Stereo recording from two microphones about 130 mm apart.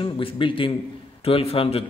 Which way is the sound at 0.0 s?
45° left (ahead or behind).